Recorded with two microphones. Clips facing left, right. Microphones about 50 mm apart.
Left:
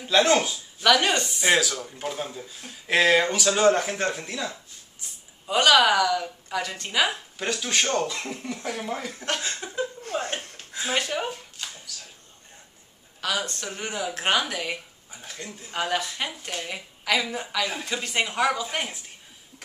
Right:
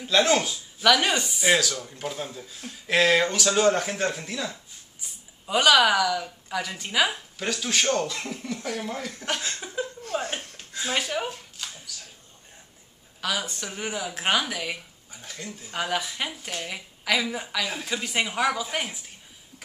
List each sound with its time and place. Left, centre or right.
0.0 s speech: centre
10.6 s a sound: centre
13.2 s speech: centre